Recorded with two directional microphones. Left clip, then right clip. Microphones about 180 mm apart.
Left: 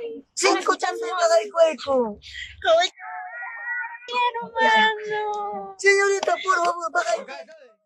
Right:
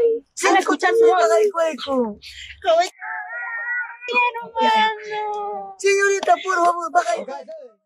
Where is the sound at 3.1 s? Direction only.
40° right (ahead or behind).